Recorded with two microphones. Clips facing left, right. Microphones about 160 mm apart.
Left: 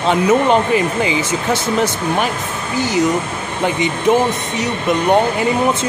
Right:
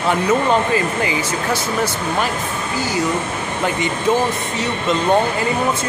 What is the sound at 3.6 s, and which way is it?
Speech, 20° left (ahead or behind).